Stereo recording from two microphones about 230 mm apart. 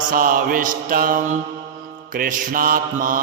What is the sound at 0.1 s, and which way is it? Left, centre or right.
Mantra, right.